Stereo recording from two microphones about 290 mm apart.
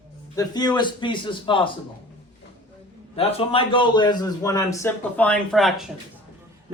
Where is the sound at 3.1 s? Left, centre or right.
Centre.